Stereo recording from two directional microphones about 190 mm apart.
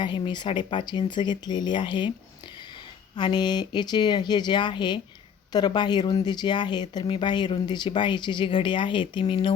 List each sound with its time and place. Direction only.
0.0 s speech: 25° left (ahead or behind)
3.2 s speech: 25° left (ahead or behind)